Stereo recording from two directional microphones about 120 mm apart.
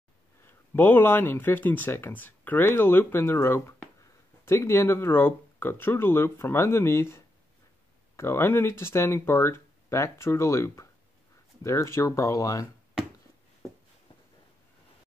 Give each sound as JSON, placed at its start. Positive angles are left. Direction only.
{"t": 0.5, "sound": "speech", "side_deg": 15}